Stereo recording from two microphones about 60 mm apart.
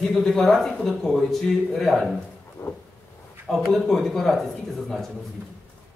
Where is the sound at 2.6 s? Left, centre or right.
Left.